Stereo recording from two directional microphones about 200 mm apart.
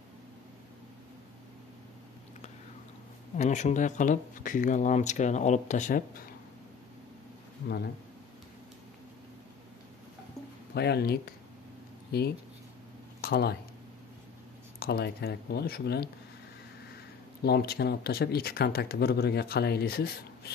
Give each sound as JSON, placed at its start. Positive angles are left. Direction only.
{"t": 3.3, "sound": "speech", "side_deg": 35}
{"t": 7.6, "sound": "speech", "side_deg": 55}
{"t": 10.7, "sound": "speech", "side_deg": 55}
{"t": 14.8, "sound": "speech", "side_deg": 50}
{"t": 17.4, "sound": "speech", "side_deg": 50}